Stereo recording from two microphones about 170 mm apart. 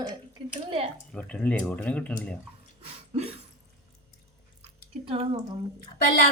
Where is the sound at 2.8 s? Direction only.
35° right (ahead or behind).